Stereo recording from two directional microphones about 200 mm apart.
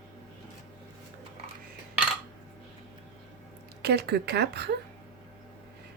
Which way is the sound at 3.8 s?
55° right (ahead or behind).